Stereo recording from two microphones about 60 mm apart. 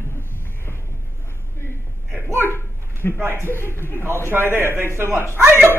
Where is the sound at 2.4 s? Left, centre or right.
Left.